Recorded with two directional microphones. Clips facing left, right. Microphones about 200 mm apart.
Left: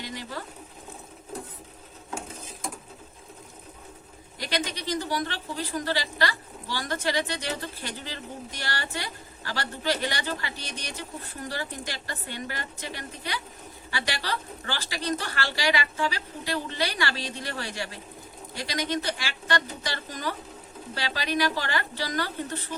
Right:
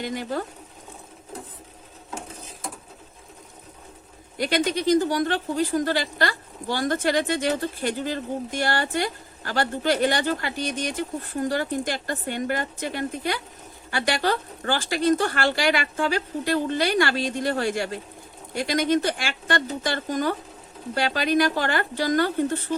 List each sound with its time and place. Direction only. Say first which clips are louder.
0.0 s speech: right 8 dB; 50° right (ahead or behind)
4.4 s speech: right 8 dB; 50° right (ahead or behind)